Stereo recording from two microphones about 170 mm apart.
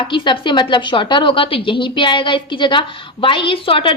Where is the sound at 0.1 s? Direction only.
30° left (ahead or behind).